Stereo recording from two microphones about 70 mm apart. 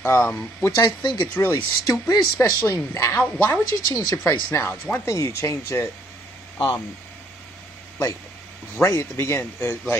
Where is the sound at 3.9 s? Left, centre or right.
Left.